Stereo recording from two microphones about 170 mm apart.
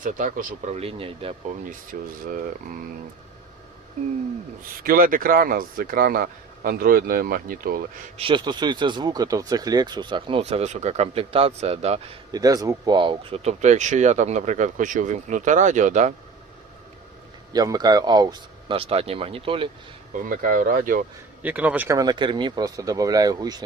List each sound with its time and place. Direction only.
0.0 s speech: 50° right (ahead or behind)
0.8 s speech: 35° right (ahead or behind)
1.9 s speech: 55° right (ahead or behind)
4.8 s speech: 60° right (ahead or behind)
8.2 s speech: 25° right (ahead or behind)
12.3 s speech: 20° right (ahead or behind); by 16.1 s 45° right (ahead or behind)
17.5 s speech: 20° right (ahead or behind)
20.2 s speech: 55° right (ahead or behind)
21.4 s speech: 10° right (ahead or behind)
21.9 s speech: 25° right (ahead or behind)